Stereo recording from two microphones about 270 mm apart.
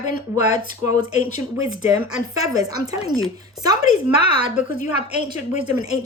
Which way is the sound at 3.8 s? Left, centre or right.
Left.